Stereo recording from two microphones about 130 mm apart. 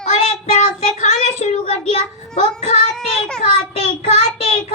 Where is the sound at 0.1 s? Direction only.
65° left (ahead or behind).